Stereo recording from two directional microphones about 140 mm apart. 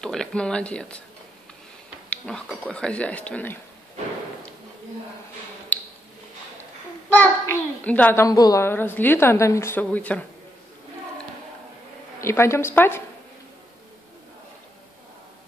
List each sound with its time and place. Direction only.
0.0 s speech: 5° left (ahead or behind)
2.0 s a sound: 5° left (ahead or behind)
2.6 s speech: 5° left (ahead or behind)
5.7 s a sound: 10° left (ahead or behind)
7.2 s a child's voice: 10° left (ahead or behind)
12.2 s a woman's voice: 20° left (ahead or behind)